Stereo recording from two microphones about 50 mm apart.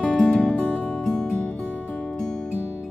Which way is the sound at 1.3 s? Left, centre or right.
Left.